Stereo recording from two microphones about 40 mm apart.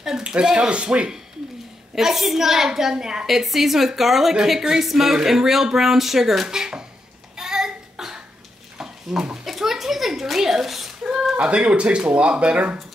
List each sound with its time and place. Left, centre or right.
0.2 s speech: centre
2.0 s a woman's voice: centre
3.3 s a woman's voice: centre
7.3 s cough: centre
8.7 s a sound: centre
11.3 s speech: right